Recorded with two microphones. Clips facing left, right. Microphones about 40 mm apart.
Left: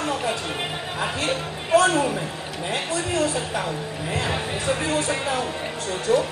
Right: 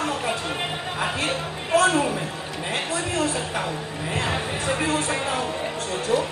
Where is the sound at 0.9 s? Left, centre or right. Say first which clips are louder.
Left 1 dB; centre.